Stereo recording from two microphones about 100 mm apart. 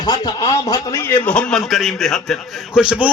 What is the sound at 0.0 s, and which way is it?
A man's voice, 40° left (ahead or behind).